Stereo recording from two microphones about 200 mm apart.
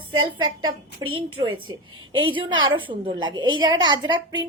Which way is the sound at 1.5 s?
90° right.